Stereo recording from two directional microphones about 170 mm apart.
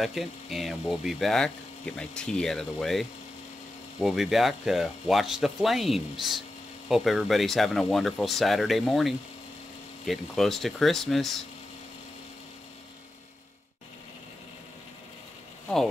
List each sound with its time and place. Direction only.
0.0 s speech: centre (ahead or behind)